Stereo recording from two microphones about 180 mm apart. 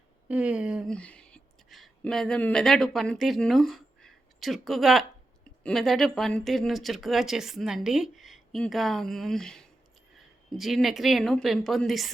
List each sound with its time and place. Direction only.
0.3 s speech: 5° right (ahead or behind)